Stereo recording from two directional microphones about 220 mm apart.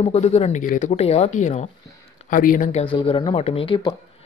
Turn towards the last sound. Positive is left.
turn(degrees=25)  # may be behind; listen again after turning